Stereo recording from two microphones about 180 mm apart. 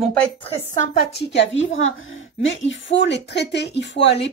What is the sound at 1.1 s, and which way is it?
A woman's voice, 80° left.